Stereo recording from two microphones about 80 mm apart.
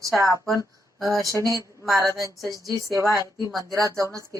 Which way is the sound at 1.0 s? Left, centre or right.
Right.